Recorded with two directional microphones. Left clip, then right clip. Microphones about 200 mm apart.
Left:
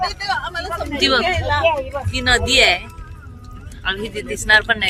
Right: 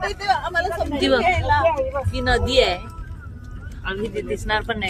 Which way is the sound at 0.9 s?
15° right (ahead or behind).